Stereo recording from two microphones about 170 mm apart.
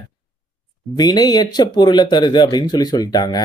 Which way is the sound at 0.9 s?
25° left (ahead or behind).